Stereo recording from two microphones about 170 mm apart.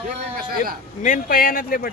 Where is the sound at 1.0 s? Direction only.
55° left (ahead or behind).